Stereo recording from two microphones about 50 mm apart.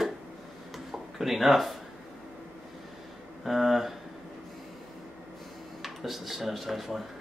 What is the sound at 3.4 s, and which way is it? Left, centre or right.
Speech, centre.